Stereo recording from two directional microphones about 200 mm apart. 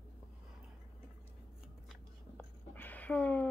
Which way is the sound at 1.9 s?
5° left (ahead or behind).